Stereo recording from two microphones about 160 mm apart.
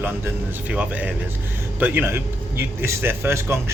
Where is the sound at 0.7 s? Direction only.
10° right (ahead or behind).